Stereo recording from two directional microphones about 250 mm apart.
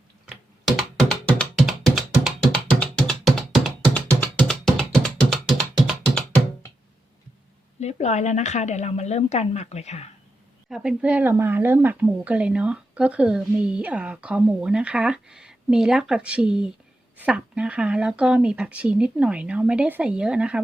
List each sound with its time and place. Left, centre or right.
0.8 s music: centre
7.8 s a woman's voice: left
10.7 s speech: centre